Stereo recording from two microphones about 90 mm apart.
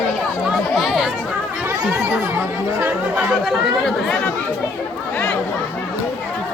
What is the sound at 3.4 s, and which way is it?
Speech, 5° left (ahead or behind).